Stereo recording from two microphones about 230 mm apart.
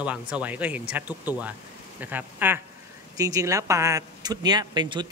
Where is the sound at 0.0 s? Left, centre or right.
Centre.